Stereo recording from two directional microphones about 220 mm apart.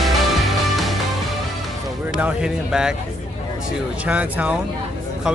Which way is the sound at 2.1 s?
5° right (ahead or behind).